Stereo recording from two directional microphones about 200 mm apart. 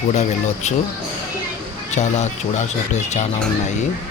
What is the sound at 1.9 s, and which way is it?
Speech, 35° left (ahead or behind).